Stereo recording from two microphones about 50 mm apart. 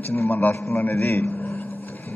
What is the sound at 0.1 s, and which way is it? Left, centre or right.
A man's voice, left.